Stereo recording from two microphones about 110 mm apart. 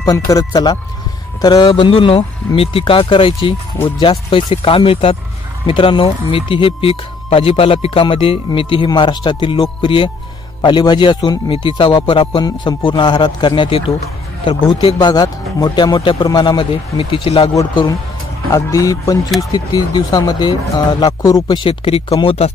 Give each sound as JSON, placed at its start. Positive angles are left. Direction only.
{"t": 0.0, "sound": "speech", "side_deg": 30}
{"t": 1.7, "sound": "speech", "side_deg": 55}
{"t": 15.0, "sound": "speech", "side_deg": 35}
{"t": 18.5, "sound": "speech", "side_deg": 30}
{"t": 21.2, "sound": "speech", "side_deg": 30}